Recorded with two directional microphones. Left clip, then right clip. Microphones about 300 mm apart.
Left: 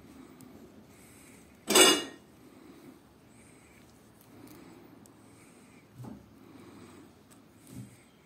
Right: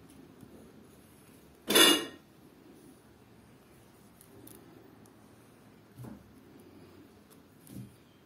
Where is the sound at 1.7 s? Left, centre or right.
Centre.